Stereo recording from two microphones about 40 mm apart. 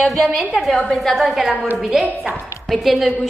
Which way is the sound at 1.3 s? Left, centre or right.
Centre.